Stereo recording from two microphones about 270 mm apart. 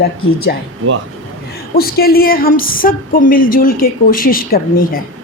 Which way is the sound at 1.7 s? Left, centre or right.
Left.